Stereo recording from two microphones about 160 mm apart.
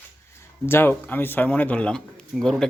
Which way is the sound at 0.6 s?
15° left (ahead or behind).